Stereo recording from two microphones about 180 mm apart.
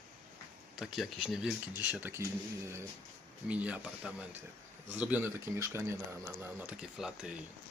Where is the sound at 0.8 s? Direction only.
Centre (ahead or behind).